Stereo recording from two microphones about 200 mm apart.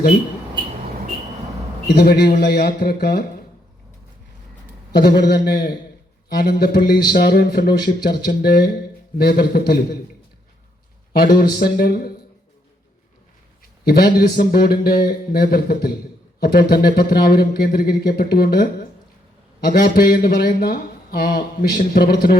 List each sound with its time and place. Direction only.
1.9 s speech: 55° left (ahead or behind)
4.9 s a man's voice: 55° left (ahead or behind)
11.3 s speech: 50° left (ahead or behind)
13.8 s speech: 50° left (ahead or behind)